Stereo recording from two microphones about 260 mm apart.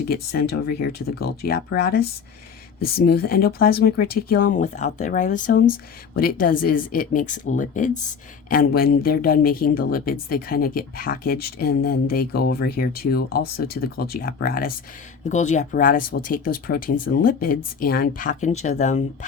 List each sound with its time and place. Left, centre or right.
0.1 s speech: left
3.1 s speech: left